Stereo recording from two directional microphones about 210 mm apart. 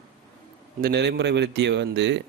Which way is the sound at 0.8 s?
50° right (ahead or behind).